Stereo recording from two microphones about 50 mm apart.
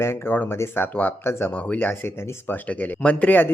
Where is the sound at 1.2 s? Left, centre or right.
Left.